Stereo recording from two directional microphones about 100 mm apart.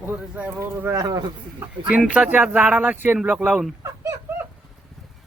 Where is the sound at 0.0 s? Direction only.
20° right (ahead or behind).